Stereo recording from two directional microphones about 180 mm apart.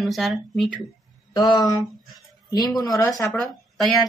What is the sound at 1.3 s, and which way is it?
Speech, 20° left (ahead or behind).